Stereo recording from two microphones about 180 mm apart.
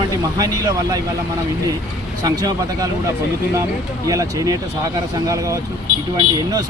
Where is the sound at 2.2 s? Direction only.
20° right (ahead or behind).